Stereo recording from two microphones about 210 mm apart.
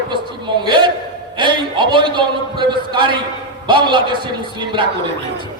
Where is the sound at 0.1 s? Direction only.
20° right (ahead or behind).